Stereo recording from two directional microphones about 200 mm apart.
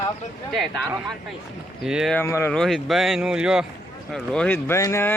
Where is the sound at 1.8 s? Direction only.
5° right (ahead or behind).